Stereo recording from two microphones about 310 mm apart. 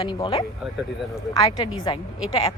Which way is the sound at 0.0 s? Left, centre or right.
Centre.